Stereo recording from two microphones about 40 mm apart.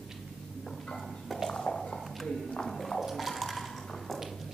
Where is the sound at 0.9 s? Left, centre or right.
Centre.